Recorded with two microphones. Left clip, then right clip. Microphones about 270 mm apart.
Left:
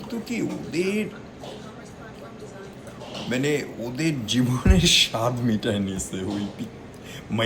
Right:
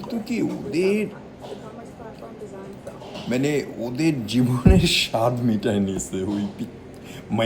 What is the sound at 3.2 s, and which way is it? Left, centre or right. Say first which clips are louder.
A man's voice: right 2 dB; centre.